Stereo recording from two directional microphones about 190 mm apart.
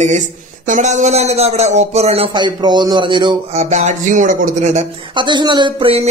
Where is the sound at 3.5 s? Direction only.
40° right (ahead or behind).